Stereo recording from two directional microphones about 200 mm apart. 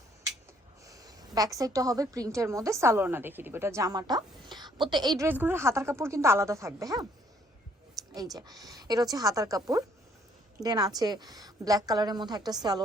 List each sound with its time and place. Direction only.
0.9 s a woman's voice: 15° right (ahead or behind)
8.1 s a woman's voice: 20° right (ahead or behind)